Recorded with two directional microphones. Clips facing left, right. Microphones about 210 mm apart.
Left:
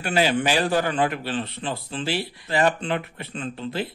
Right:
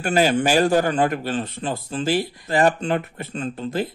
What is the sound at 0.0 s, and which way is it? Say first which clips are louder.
Speech: right 3 dB; 45° right (ahead or behind).